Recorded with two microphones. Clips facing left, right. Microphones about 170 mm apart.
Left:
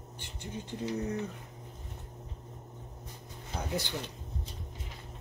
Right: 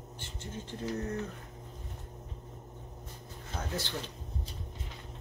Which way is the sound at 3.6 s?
15° left (ahead or behind).